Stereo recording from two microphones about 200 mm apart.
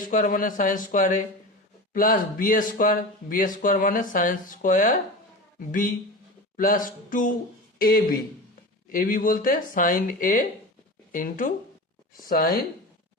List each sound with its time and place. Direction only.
0.0 s speech: 45° left (ahead or behind)